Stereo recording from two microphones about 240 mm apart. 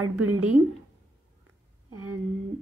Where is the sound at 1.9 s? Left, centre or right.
Right.